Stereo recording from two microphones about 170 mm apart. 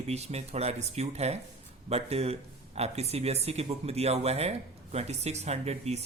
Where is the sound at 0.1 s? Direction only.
40° right (ahead or behind).